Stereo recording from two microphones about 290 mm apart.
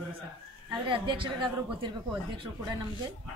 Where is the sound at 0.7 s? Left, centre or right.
Centre.